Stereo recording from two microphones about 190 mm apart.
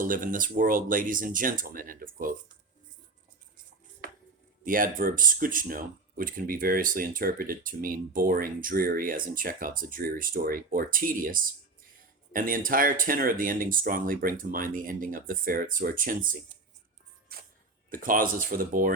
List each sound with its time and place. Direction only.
0.0 s speech: 45° right (ahead or behind)
4.6 s speech: 45° right (ahead or behind)
17.3 s music: 50° right (ahead or behind)
17.9 s speech: 45° right (ahead or behind)